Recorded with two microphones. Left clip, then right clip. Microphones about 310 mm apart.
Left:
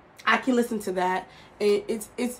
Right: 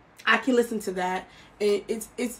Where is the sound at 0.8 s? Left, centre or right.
Centre.